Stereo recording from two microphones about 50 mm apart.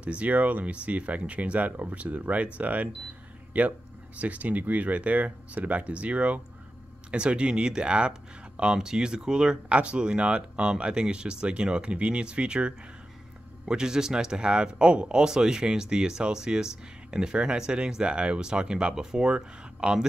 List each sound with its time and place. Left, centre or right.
0.0 s speech: right